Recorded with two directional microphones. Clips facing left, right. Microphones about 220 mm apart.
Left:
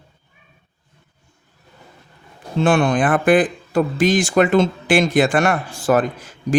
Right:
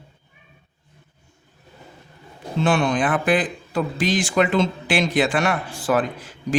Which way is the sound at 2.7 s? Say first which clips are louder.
Left 4 dB; 50° left (ahead or behind).